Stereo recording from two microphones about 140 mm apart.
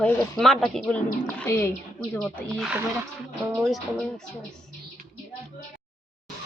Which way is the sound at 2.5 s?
Centre (ahead or behind).